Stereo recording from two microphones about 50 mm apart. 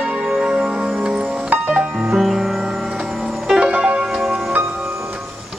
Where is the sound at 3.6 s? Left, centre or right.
Right.